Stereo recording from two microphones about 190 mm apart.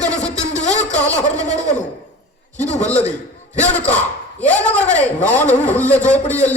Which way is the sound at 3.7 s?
5° left (ahead or behind).